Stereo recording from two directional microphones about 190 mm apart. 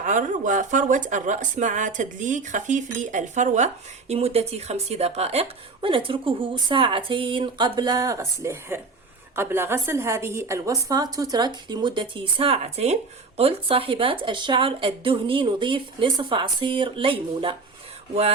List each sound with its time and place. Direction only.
0.0 s a woman's voice: 45° right (ahead or behind); by 17.6 s 25° right (ahead or behind)